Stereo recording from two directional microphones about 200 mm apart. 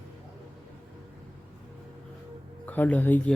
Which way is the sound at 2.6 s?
10° left (ahead or behind).